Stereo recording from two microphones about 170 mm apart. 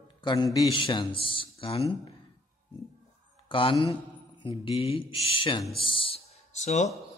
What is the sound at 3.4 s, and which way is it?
Speech, 30° left (ahead or behind).